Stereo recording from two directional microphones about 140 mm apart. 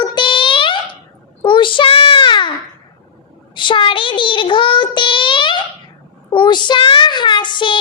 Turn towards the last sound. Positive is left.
turn(degrees=35)  # may be behind; listen again after turning